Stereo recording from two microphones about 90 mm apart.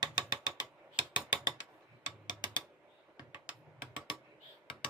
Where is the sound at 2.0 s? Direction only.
55° left (ahead or behind).